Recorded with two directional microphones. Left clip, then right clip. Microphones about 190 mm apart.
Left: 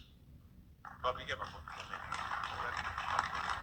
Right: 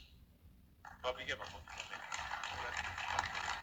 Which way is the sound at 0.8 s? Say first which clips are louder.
Left 3 dB; 45° right (ahead or behind).